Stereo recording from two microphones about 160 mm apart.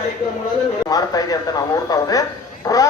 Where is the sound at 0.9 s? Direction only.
25° left (ahead or behind).